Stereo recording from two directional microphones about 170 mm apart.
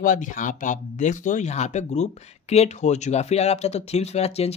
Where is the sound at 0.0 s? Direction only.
50° left (ahead or behind).